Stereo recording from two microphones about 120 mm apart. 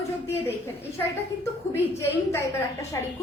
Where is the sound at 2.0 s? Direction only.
25° left (ahead or behind).